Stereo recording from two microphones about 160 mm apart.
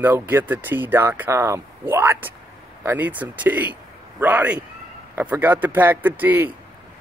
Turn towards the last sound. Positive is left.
turn(degrees=-10)  # may be behind; listen again after turning